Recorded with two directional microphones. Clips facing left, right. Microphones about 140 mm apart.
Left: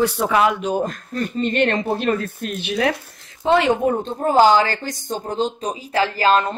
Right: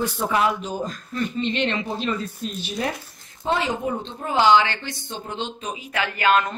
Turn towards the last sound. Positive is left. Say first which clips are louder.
# left 3 dB
turn(degrees=30)  # may be behind; listen again after turning